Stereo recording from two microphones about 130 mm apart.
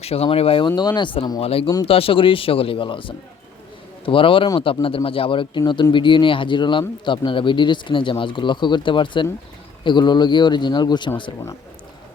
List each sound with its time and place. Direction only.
0.0 s speech: 50° left (ahead or behind)
0.8 s speech: 35° left (ahead or behind)
1.4 s speech: 50° left (ahead or behind)